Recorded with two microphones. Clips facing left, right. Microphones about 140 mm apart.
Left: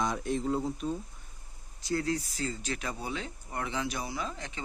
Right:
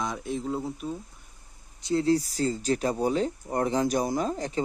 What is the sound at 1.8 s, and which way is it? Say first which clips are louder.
Speech: right 7 dB; 25° right (ahead or behind).